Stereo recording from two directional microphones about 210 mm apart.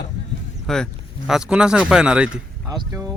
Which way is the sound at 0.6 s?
Centre (ahead or behind).